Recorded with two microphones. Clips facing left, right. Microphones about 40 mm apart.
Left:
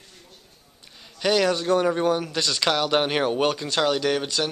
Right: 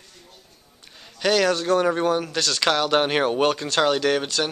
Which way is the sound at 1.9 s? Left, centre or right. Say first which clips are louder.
Right 1 dB; centre.